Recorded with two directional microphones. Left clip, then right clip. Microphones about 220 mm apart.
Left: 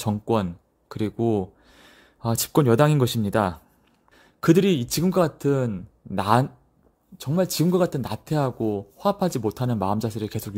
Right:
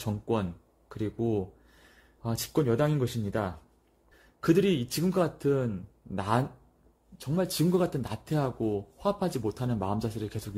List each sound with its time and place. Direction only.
0.0 s speech: 35° left (ahead or behind)